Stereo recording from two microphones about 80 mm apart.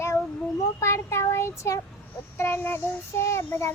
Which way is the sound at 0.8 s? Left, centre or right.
Left.